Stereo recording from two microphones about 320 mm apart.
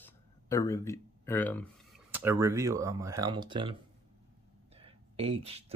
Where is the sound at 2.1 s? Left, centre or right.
Centre.